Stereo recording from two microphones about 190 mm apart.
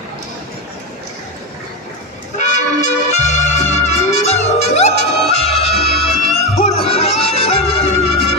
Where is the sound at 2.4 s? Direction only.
40° left (ahead or behind).